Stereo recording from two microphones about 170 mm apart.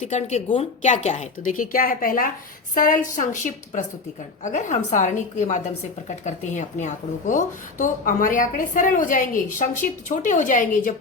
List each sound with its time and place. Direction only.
0.0 s speech: 40° left (ahead or behind)